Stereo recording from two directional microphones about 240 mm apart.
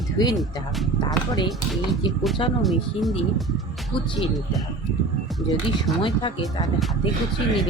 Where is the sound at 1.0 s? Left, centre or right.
Centre.